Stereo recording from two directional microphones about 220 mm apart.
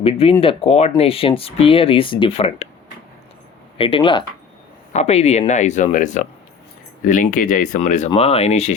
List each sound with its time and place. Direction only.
0.0 s speech: 25° left (ahead or behind)
3.8 s speech: 25° left (ahead or behind)